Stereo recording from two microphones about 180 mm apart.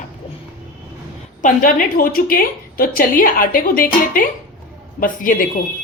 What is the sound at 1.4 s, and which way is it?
A woman's voice, 50° left (ahead or behind).